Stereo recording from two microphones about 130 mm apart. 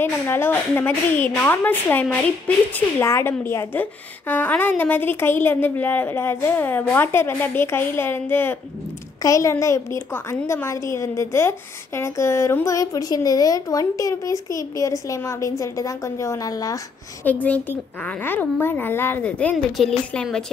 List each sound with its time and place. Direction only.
0.0 s a woman's voice: 15° left (ahead or behind)
17.2 s a woman's voice: 10° left (ahead or behind)